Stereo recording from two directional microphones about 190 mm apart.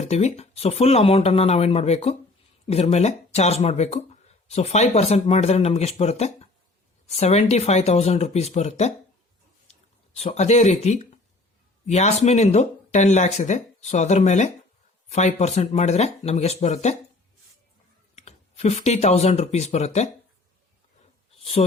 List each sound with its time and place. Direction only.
0.0 s speech: 35° left (ahead or behind)
18.1 s speech: 35° left (ahead or behind)